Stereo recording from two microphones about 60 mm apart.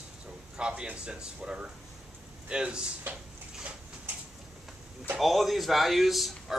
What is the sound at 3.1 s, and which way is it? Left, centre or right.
Speech, right.